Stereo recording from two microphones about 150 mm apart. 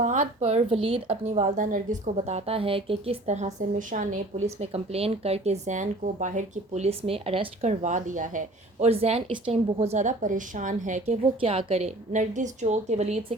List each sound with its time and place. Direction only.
0.0 s speech: 55° right (ahead or behind)